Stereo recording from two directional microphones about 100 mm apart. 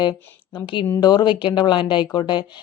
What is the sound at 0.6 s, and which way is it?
Speech, 55° left (ahead or behind).